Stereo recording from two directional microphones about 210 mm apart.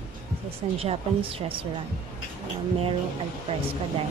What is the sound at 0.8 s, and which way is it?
Speech, 25° right (ahead or behind).